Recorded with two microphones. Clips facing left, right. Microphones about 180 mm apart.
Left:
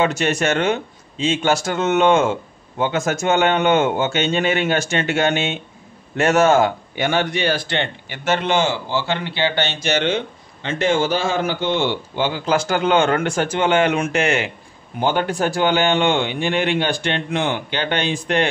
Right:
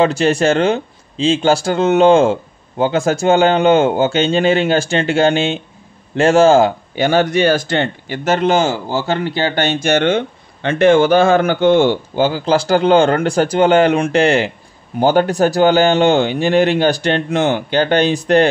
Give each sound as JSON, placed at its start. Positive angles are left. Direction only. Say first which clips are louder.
{"t": 0.0, "sound": "speech", "louder": "right 6 dB", "side_deg": -30}